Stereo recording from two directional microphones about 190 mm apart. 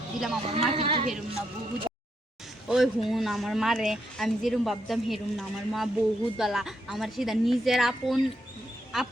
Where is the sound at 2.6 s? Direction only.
Centre (ahead or behind).